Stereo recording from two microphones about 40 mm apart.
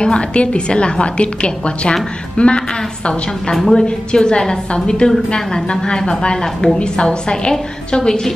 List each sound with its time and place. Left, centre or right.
0.0 s a woman's voice: left
3.7 s a woman's voice: left
6.8 s a woman's voice: left